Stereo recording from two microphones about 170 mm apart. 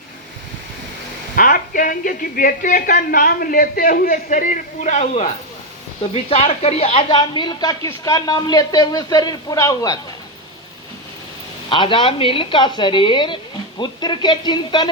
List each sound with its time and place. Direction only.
1.4 s speech: 55° left (ahead or behind)
6.3 s speech: 35° left (ahead or behind); by 10.0 s 20° left (ahead or behind)
11.7 s speech: 30° left (ahead or behind)